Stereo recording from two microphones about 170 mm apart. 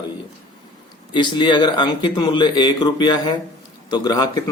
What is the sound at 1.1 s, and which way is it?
Speech, 30° left (ahead or behind).